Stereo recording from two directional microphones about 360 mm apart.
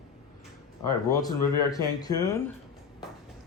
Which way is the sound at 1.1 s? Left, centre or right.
Centre.